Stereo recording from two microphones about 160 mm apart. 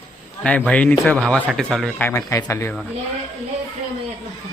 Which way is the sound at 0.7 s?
10° left (ahead or behind).